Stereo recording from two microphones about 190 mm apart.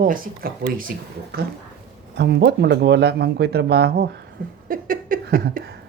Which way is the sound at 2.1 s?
65° right (ahead or behind).